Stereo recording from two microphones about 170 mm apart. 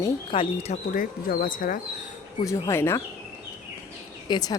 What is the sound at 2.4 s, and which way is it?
Speech, 20° left (ahead or behind).